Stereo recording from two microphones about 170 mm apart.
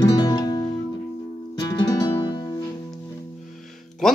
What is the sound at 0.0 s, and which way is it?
Music, 20° left (ahead or behind).